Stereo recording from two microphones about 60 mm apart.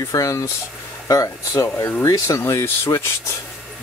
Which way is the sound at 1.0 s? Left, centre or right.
Left.